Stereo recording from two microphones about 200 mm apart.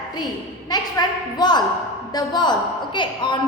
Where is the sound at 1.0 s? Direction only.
20° left (ahead or behind).